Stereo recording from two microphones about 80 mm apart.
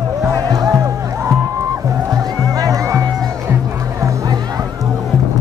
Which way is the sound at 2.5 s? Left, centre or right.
Right.